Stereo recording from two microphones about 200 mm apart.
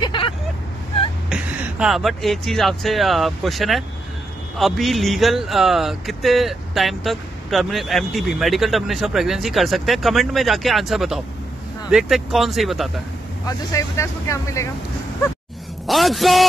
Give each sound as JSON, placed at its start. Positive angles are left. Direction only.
{"t": 0.0, "sound": "vehicle", "side_deg": 25}
{"t": 1.3, "sound": "speech", "side_deg": -5}
{"t": 13.7, "sound": "speech", "side_deg": 15}
{"t": 15.9, "sound": "speech", "side_deg": 0}